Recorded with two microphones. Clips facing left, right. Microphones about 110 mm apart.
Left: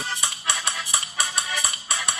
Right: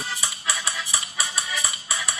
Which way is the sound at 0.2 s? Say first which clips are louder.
Left 1 dB; 25° left (ahead or behind).